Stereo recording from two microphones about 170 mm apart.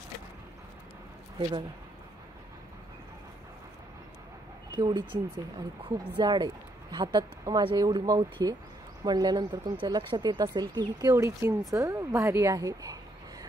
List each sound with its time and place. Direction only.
4.7 s a woman's voice: 25° right (ahead or behind)